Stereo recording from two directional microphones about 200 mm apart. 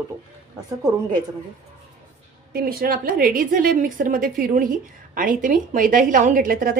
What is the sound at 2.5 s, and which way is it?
A woman's voice, 45° right (ahead or behind).